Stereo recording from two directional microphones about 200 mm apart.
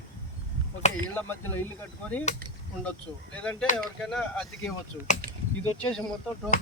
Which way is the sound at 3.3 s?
5° left (ahead or behind).